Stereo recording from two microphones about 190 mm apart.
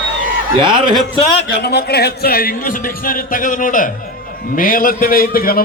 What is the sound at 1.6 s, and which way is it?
A man's voice, 55° left (ahead or behind).